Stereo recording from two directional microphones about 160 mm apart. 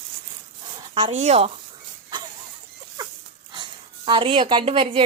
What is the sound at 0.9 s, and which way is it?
Speech, 40° right (ahead or behind).